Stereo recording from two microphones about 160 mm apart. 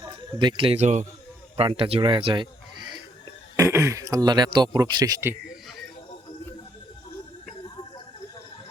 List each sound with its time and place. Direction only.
0.0 s speech: 25° right (ahead or behind); by 1.0 s 45° right (ahead or behind)
1.5 s speech: 35° right (ahead or behind)
3.6 s speech: 20° right (ahead or behind)